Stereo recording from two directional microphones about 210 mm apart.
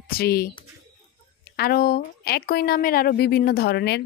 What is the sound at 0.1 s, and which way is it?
Speech, 50° left (ahead or behind).